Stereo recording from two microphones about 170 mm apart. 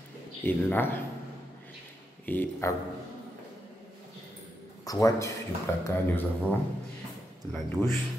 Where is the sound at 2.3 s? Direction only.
15° left (ahead or behind).